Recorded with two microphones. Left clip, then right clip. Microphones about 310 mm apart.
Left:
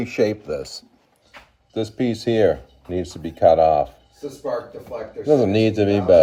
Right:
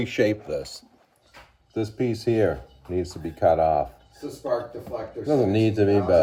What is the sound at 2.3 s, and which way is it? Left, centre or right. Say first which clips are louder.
Speech: left 6 dB; left.